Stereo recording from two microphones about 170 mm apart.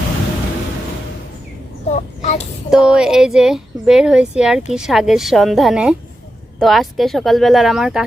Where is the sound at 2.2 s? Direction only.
40° left (ahead or behind).